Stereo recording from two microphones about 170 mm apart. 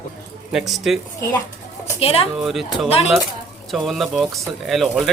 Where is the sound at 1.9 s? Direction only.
35° left (ahead or behind).